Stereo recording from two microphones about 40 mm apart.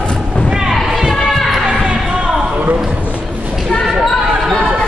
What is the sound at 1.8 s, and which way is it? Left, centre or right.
Music, centre.